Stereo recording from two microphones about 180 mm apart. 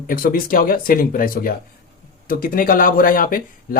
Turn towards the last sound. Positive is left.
turn(degrees=55)  # may be behind; listen again after turning